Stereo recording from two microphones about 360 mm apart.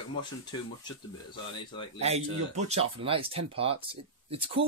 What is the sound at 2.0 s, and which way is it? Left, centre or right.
Speech, centre.